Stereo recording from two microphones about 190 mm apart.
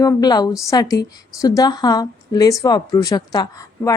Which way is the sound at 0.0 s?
20° left (ahead or behind).